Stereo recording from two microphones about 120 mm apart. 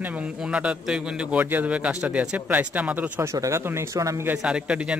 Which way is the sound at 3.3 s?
25° right (ahead or behind).